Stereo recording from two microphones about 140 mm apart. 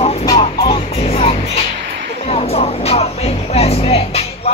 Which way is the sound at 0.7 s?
45° left (ahead or behind).